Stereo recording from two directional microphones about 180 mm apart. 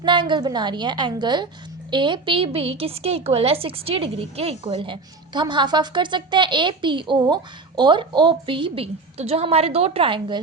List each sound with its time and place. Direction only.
0.0 s a woman's voice: 25° right (ahead or behind)